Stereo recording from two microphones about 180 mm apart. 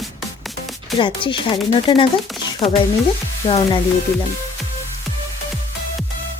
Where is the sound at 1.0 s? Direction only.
25° left (ahead or behind).